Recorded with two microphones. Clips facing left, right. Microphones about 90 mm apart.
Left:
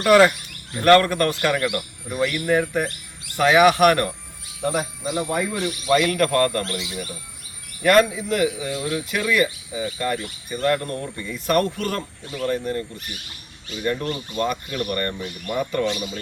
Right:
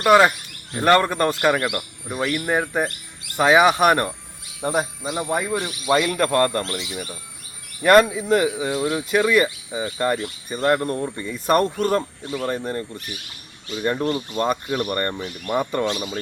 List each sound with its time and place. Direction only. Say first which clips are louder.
0.0 s speech: even; 15° right (ahead or behind)
1.6 s speech: left 1 dB; 10° right (ahead or behind)
2.1 s speech: left 2 dB; 20° right (ahead or behind)
7.9 s speech: right 2 dB; 25° right (ahead or behind)
13.8 s speech: right 3 dB; 25° right (ahead or behind)